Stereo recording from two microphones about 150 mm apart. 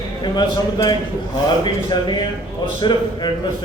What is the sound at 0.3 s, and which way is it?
A man's voice, 30° left (ahead or behind).